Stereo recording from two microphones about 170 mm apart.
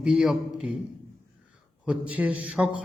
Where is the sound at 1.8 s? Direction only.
10° right (ahead or behind).